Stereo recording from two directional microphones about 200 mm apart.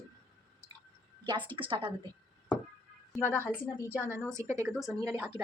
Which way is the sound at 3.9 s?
10° right (ahead or behind).